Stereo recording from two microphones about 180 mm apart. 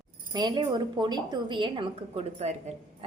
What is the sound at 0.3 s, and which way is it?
A woman's voice, 25° right (ahead or behind).